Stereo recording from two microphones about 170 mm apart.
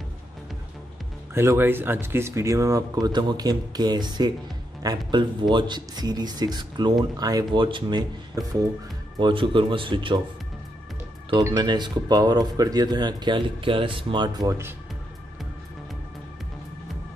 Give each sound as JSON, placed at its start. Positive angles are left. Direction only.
{"t": 1.3, "sound": "speech", "side_deg": -15}
{"t": 11.3, "sound": "speech", "side_deg": -25}